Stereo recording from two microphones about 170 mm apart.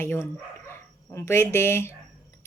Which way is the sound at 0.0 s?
15° left (ahead or behind).